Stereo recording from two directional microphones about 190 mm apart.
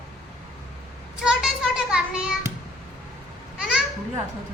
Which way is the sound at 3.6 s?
5° right (ahead or behind).